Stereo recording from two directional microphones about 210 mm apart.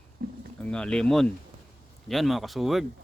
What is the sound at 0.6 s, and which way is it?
Speech, 5° left (ahead or behind).